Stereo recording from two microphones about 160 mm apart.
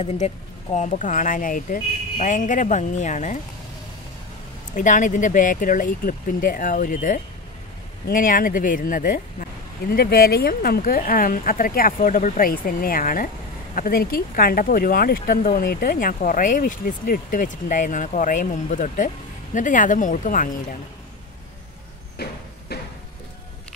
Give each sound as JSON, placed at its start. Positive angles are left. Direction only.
{"t": 0.0, "sound": "speech", "side_deg": 40}
{"t": 4.7, "sound": "speech", "side_deg": 50}
{"t": 22.1, "sound": "a sound", "side_deg": 80}